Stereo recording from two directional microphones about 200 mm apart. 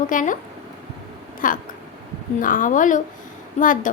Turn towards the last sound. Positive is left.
turn(degrees=40)  # may be behind; listen again after turning